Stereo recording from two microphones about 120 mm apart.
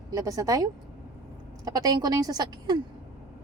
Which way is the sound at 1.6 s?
30° right (ahead or behind).